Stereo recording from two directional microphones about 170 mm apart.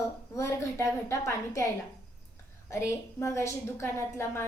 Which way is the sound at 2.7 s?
15° left (ahead or behind).